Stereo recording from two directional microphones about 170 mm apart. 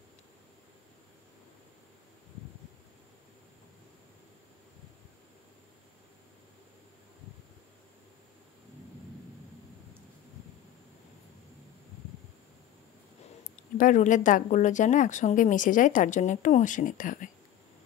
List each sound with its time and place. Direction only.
13.6 s speech: 50° left (ahead or behind)